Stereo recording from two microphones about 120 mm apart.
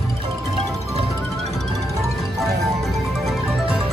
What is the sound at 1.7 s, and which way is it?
Music, 25° right (ahead or behind).